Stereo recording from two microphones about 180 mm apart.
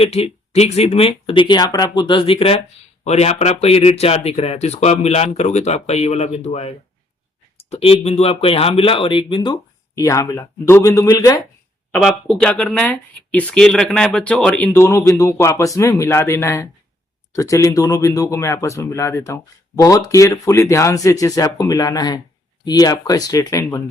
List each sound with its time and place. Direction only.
0.0 s speech: 35° left (ahead or behind); by 11.4 s 20° left (ahead or behind)
11.9 s speech: centre (ahead or behind); by 23.8 s 15° left (ahead or behind)